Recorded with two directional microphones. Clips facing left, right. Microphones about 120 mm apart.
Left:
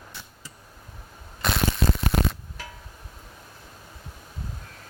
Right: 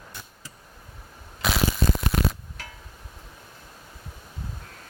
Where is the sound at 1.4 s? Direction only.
5° right (ahead or behind).